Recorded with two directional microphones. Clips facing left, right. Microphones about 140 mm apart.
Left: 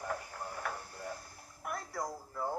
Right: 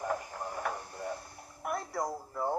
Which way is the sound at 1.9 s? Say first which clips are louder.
Right 4 dB; 20° right (ahead or behind).